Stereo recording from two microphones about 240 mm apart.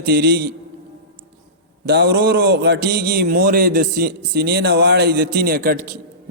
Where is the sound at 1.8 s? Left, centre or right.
Right.